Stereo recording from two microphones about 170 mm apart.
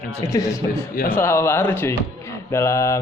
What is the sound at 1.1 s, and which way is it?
A man's voice, 15° left (ahead or behind).